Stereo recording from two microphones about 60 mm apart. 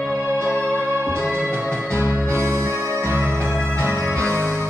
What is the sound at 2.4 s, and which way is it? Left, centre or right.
Music, right.